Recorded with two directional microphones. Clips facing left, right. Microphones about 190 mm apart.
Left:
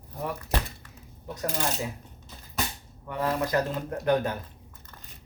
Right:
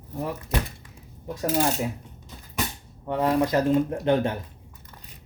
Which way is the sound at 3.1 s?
20° right (ahead or behind).